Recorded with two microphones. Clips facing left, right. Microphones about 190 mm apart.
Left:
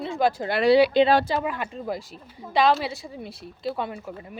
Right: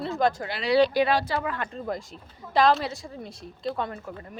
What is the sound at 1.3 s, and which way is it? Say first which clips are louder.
A woman's voice: left 2 dB; 10° left (ahead or behind).